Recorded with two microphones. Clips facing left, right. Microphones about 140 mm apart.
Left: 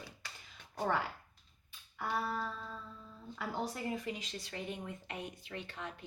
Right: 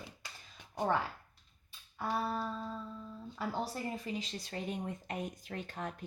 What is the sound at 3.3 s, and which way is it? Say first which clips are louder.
Speech: right 1 dB; 30° right (ahead or behind).